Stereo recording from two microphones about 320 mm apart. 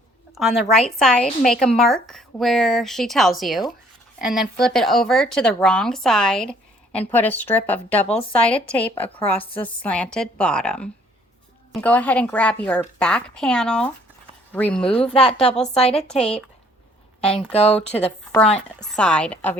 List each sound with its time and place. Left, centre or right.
0.3 s speech: centre
17.5 s speech: centre
17.7 s speech: centre